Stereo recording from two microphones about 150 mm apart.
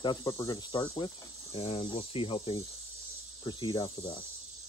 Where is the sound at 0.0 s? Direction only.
30° left (ahead or behind).